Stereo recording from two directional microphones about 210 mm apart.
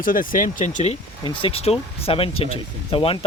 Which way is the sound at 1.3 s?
25° left (ahead or behind).